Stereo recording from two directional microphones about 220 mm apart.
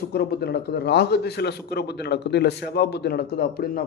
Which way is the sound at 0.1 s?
45° left (ahead or behind).